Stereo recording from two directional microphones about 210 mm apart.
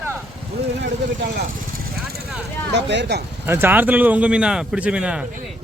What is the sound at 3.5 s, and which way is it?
A man's voice, 10° right (ahead or behind).